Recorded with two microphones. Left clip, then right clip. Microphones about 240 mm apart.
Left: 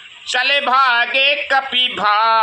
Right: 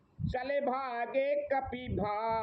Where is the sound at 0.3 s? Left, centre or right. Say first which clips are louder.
Left 17 dB; left.